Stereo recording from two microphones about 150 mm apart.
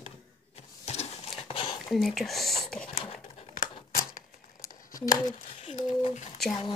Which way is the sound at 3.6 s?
65° left (ahead or behind).